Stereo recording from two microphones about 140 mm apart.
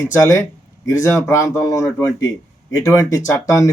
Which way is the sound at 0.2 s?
25° left (ahead or behind).